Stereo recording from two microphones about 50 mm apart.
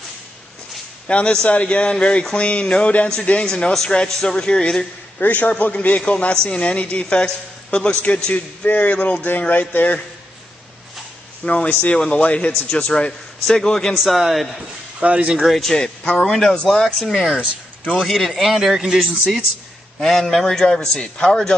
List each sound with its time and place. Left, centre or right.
1.0 s a man's voice: left
5.2 s a man's voice: left
11.4 s a man's voice: left
13.5 s a man's voice: centre
13.9 s a man's voice: centre
15.0 s speech: right
15.4 s a man's voice: centre
15.7 s a man's voice: centre
20.0 s a man's voice: centre